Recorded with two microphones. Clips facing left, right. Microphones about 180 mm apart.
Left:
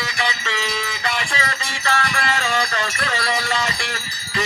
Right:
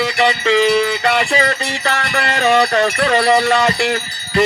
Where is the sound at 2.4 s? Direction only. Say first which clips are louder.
Right 10 dB; 55° right (ahead or behind).